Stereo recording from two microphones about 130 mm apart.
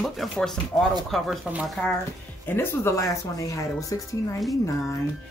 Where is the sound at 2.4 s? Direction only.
15° left (ahead or behind).